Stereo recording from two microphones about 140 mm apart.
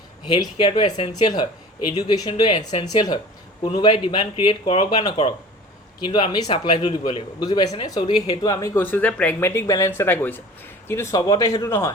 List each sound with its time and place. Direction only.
0.3 s speech: 35° left (ahead or behind)